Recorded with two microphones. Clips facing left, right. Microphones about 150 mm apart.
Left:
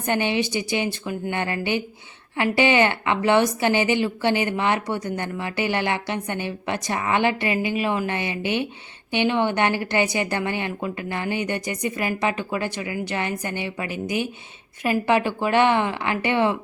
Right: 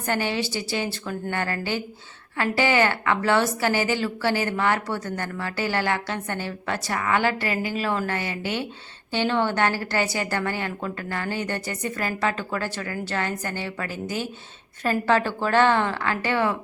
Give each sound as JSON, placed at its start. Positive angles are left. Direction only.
{"t": 0.0, "sound": "a woman's voice", "side_deg": 20}